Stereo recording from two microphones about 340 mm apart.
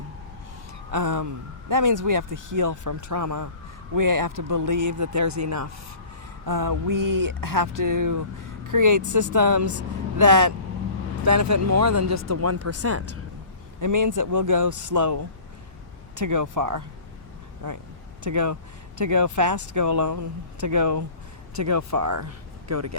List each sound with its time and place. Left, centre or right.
0.9 s speech: right
6.4 s speech: right
13.8 s speech: right